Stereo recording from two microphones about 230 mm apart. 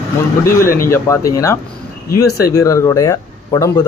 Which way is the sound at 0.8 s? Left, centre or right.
Centre.